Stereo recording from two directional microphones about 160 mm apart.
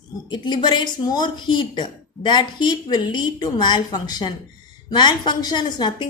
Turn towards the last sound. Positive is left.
turn(degrees=25)  # may be behind; listen again after turning